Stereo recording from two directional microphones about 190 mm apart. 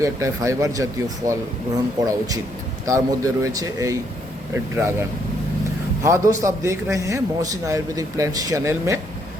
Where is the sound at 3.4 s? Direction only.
20° right (ahead or behind).